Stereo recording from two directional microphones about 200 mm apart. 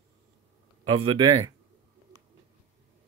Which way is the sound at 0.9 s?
25° right (ahead or behind).